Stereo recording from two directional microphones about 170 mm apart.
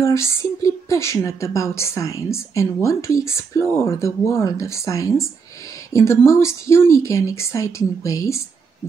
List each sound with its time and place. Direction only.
0.0 s a woman's voice: 15° left (ahead or behind)